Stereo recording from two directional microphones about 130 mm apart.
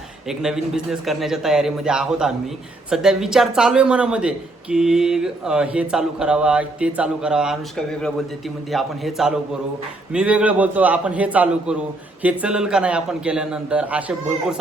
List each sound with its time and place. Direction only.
0.3 s a man's voice: 5° right (ahead or behind)